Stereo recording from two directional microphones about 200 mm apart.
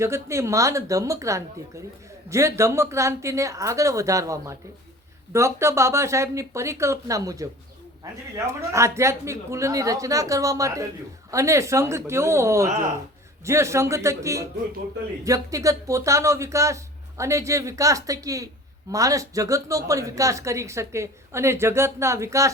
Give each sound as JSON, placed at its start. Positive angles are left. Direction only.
{"t": 0.0, "sound": "speech", "side_deg": -15}